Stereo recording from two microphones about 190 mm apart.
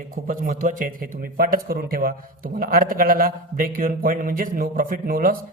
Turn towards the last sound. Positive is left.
turn(degrees=-50)  # may be behind; listen again after turning